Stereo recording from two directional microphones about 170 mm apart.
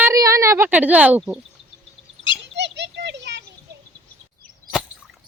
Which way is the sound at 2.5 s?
90° right.